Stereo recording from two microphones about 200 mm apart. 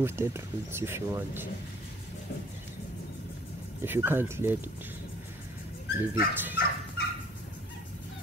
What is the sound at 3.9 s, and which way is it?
Speech, 10° right (ahead or behind).